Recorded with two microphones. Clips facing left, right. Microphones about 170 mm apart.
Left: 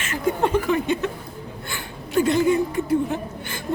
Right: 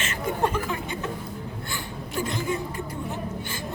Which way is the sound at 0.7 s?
70° left (ahead or behind).